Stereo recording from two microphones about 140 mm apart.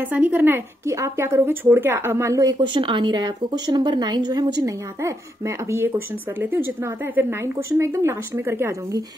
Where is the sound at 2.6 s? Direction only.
35° right (ahead or behind); by 9.0 s 20° right (ahead or behind).